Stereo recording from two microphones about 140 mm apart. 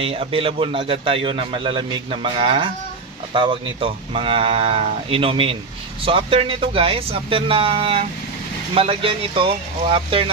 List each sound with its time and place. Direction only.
0.0 s a man's voice: 45° right (ahead or behind)